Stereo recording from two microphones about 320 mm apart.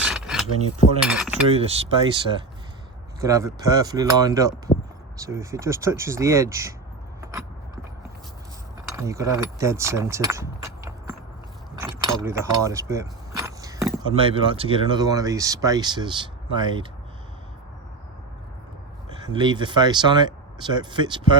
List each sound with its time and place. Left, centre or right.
0.0 s a sound: centre
1.0 s cutlery: centre
1.5 s speech: centre
7.2 s keys jangling: centre
9.0 s speech: centre
12.1 s speech: centre
19.0 s speech: centre